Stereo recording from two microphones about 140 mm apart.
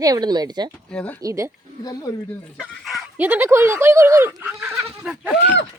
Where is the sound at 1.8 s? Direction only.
25° left (ahead or behind).